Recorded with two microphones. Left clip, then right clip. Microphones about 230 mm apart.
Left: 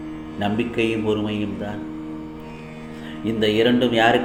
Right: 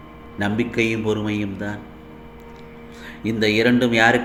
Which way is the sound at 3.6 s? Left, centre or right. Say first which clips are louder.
Right 1 dB; right.